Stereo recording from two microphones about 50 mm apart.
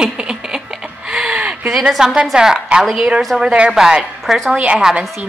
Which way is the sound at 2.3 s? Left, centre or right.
Centre.